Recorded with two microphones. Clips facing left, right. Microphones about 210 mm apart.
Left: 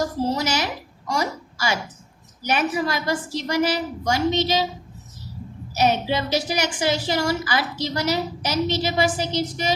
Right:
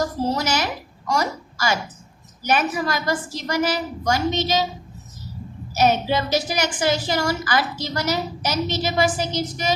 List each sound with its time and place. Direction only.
0.3 s a woman's voice: 50° right (ahead or behind)
5.7 s a woman's voice: 45° right (ahead or behind)